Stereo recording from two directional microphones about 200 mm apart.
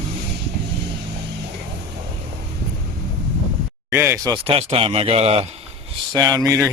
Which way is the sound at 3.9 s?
10° right (ahead or behind).